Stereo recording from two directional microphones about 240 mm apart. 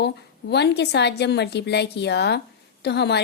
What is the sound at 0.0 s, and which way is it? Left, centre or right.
A woman's voice, left.